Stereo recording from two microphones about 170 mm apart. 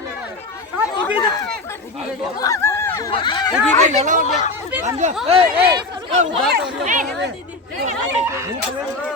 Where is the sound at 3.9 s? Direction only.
45° right (ahead or behind).